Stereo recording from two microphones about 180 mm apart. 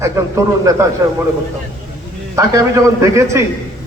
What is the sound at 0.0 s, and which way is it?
Speech, 15° right (ahead or behind).